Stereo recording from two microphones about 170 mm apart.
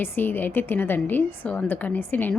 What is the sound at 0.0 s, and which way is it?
A woman's voice, 10° left (ahead or behind).